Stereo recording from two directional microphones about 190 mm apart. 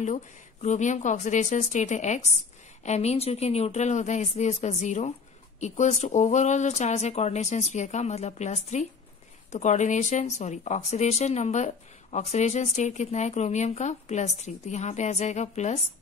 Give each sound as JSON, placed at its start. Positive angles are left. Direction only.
{"t": 0.0, "sound": "speech", "side_deg": 40}